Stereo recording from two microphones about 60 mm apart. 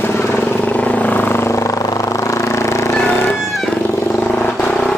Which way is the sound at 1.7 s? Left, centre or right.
Left.